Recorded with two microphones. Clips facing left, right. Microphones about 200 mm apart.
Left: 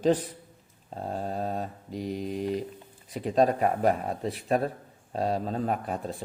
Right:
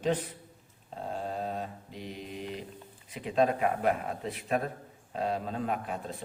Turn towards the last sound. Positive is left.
turn(degrees=40)  # may be behind; listen again after turning